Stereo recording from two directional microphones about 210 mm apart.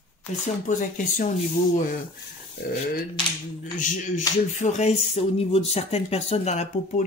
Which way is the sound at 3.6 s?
35° left (ahead or behind).